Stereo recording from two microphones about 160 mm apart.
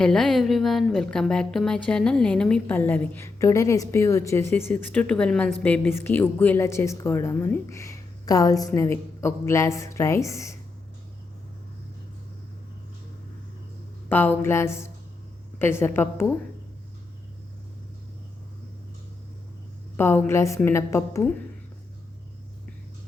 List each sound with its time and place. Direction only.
0.0 s a woman's voice: 5° left (ahead or behind)
14.1 s a woman's voice: 10° left (ahead or behind)
20.0 s a woman's voice: 15° left (ahead or behind)